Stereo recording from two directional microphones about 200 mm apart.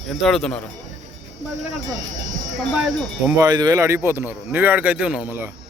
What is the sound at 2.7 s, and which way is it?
Speech, centre (ahead or behind).